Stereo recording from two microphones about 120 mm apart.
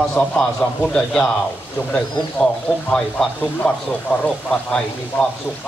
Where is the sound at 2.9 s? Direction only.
5° left (ahead or behind).